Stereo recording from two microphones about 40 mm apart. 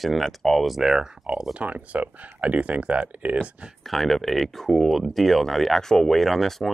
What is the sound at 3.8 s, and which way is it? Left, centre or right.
Speech, centre.